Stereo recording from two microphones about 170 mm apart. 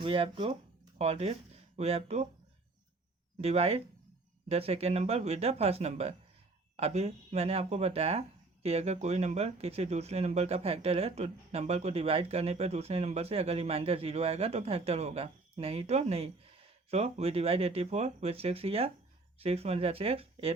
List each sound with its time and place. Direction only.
0.0 s speech: 30° right (ahead or behind)
3.4 s speech: 40° right (ahead or behind)